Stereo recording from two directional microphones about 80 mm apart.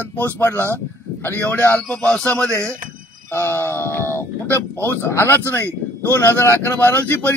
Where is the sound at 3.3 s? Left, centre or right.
Left.